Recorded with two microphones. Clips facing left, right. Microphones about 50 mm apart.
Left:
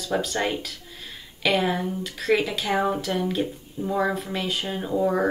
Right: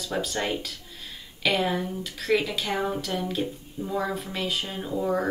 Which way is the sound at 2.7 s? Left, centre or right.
Centre.